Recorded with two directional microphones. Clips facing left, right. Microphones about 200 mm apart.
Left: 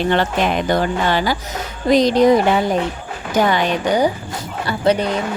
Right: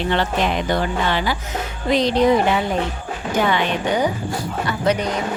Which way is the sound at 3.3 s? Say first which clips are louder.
Left 3 dB; 40° left (ahead or behind).